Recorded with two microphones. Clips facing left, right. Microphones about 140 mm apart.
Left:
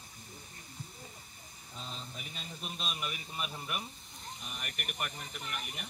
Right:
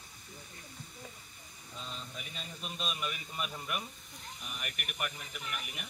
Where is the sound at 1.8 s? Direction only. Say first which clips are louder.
Even; 35° left (ahead or behind).